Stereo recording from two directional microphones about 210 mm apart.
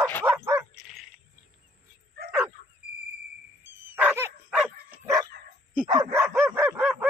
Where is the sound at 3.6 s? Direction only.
10° right (ahead or behind).